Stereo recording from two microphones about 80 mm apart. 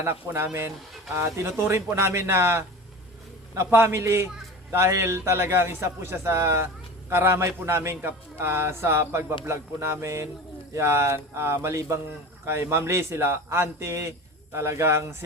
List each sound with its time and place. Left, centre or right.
0.0 s a man's voice: right